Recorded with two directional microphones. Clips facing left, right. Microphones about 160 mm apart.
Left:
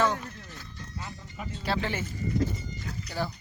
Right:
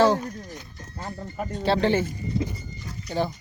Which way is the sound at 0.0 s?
35° right (ahead or behind).